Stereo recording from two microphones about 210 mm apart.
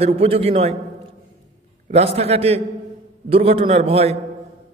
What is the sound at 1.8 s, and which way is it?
A man's voice, 30° right (ahead or behind).